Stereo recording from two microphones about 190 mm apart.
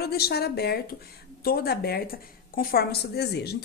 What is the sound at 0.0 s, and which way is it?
A woman's voice, 55° left (ahead or behind).